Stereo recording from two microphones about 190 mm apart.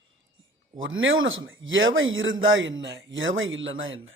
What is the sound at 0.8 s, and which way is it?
Speech, 90° right.